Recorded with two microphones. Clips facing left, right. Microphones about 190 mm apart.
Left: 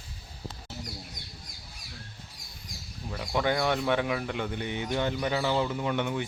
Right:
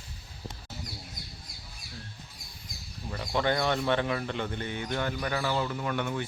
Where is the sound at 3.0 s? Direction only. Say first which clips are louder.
Even; 5° left (ahead or behind).